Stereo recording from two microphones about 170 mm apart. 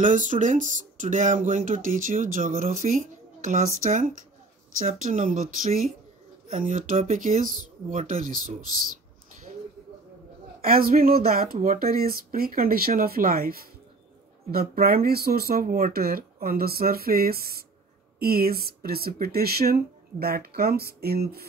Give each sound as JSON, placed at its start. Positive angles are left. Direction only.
{"t": 0.0, "sound": "speech", "side_deg": -50}
{"t": 7.0, "sound": "speech", "side_deg": -40}
{"t": 7.4, "sound": "speech", "side_deg": -50}
{"t": 10.6, "sound": "speech", "side_deg": -60}